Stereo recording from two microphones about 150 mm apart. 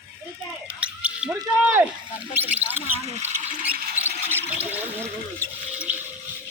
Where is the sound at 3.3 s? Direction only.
50° right (ahead or behind).